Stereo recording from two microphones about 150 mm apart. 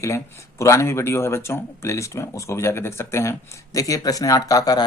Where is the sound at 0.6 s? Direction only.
20° left (ahead or behind).